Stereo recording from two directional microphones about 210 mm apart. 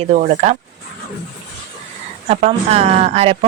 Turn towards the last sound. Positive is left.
turn(degrees=-30)  # may be behind; listen again after turning